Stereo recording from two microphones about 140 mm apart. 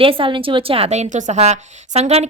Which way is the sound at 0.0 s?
40° right (ahead or behind).